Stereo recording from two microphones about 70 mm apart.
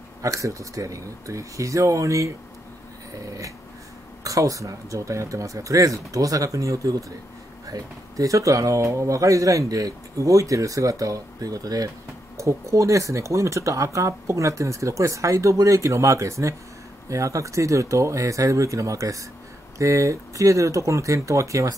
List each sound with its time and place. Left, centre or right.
0.2 s speech: right
4.2 s speech: right
12.4 s speech: right